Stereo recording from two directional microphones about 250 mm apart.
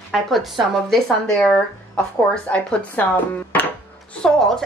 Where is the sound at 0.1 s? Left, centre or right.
Centre.